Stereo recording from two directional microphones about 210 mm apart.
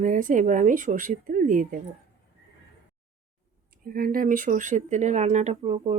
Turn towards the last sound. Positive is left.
turn(degrees=-30)  # may be behind; listen again after turning